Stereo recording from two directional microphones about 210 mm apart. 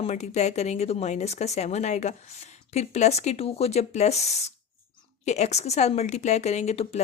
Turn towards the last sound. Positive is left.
turn(degrees=30)  # may be behind; listen again after turning